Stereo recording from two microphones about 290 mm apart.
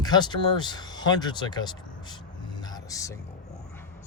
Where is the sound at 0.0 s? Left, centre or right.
Centre.